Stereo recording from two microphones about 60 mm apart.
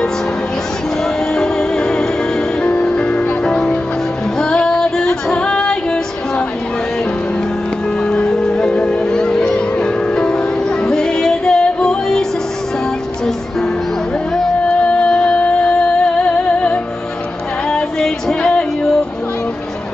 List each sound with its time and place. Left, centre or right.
1.3 s music: centre
4.4 s female singing: centre
8.0 s music: centre
14.9 s music: centre